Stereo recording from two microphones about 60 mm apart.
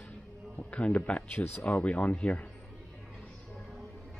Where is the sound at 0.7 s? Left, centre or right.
Left.